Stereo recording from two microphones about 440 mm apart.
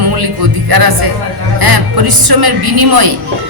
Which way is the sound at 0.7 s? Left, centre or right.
Right.